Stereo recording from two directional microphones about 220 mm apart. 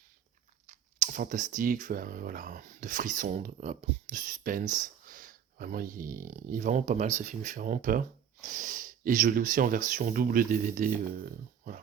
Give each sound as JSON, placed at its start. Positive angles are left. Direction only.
{"t": 0.7, "sound": "speech", "side_deg": -35}